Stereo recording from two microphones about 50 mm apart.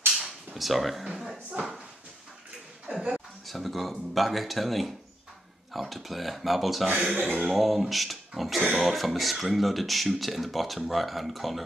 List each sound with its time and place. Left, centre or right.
0.6 s speech: centre
1.5 s drawer open or close: centre
2.9 s speech: centre
3.4 s speech: centre
7.2 s speech: right
7.5 s speech: centre